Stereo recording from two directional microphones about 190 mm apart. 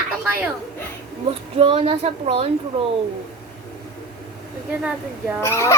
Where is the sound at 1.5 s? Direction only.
30° right (ahead or behind).